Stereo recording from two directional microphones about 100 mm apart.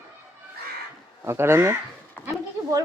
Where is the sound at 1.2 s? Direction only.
25° right (ahead or behind).